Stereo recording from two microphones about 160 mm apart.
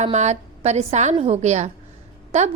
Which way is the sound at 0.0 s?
45° right (ahead or behind).